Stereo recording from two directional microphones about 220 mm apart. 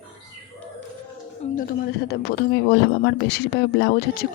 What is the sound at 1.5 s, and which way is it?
Speech, 45° left (ahead or behind).